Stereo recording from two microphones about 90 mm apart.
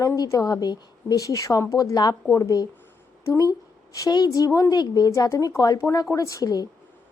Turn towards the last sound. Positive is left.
turn(degrees=45)  # may be behind; listen again after turning